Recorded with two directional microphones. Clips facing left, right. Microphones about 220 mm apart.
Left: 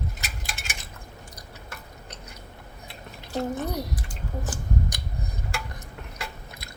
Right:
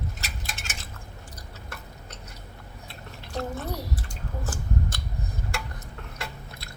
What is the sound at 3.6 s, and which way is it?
Speech, 15° left (ahead or behind).